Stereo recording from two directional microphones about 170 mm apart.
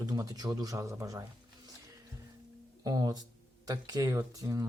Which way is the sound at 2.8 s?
20° right (ahead or behind).